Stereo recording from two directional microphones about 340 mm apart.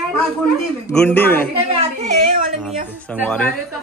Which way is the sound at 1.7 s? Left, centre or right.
Centre.